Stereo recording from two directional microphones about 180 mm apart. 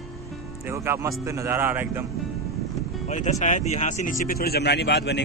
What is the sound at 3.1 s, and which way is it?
Speech, 40° left (ahead or behind).